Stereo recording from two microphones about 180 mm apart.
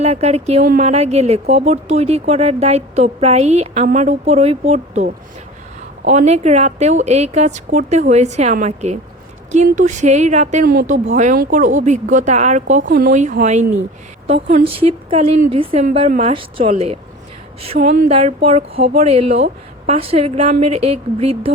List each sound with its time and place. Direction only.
0.0 s speech: 35° right (ahead or behind)
0.6 s a woman's voice: 45° right (ahead or behind)
17.7 s a woman's voice: 55° right (ahead or behind)
18.1 s speech: 35° right (ahead or behind)